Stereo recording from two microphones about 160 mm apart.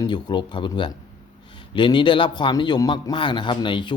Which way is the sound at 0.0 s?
30° left (ahead or behind).